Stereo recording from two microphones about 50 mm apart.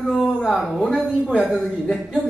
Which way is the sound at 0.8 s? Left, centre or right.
Centre.